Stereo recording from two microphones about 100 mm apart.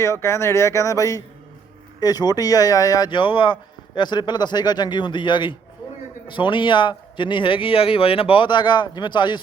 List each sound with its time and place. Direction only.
0.0 s speech: 25° left (ahead or behind)
3.1 s speech: 55° left (ahead or behind)